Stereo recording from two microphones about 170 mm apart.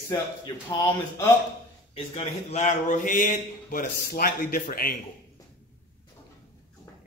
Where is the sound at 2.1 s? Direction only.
40° left (ahead or behind).